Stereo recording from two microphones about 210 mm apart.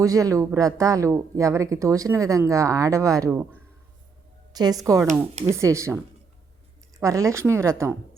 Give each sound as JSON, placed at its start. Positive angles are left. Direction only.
{"t": 0.0, "sound": "speech", "side_deg": -15}
{"t": 4.5, "sound": "a woman's voice", "side_deg": -20}
{"t": 7.0, "sound": "speech", "side_deg": -15}